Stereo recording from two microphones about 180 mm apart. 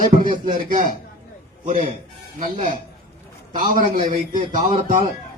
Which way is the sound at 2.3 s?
45° right (ahead or behind).